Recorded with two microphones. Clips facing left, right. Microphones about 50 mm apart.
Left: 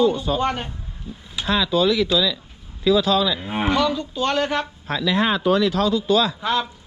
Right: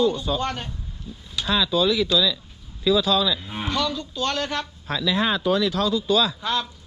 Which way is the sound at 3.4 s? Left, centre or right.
Left.